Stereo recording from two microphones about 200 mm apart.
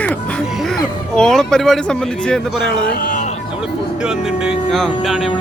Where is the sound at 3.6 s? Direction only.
5° right (ahead or behind).